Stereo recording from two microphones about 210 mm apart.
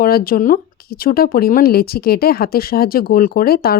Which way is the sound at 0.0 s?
45° left (ahead or behind).